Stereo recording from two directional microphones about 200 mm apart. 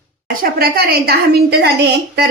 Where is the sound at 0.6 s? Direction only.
50° right (ahead or behind).